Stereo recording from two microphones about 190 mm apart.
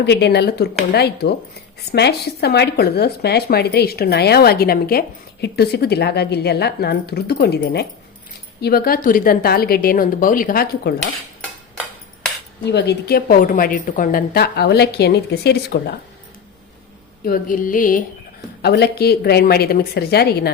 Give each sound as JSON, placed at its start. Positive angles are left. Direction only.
{"t": 0.0, "sound": "a woman's voice", "side_deg": 60}
{"t": 12.6, "sound": "speech", "side_deg": 60}
{"t": 17.2, "sound": "a woman's voice", "side_deg": 50}
{"t": 18.6, "sound": "speech", "side_deg": 60}